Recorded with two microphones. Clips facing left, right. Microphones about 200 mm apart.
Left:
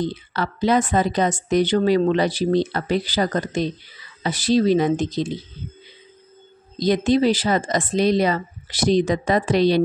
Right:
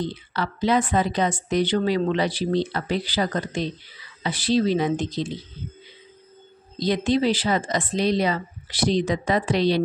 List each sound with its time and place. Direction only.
0.0 s a woman's voice: 45° left (ahead or behind)
6.8 s a woman's voice: 45° left (ahead or behind)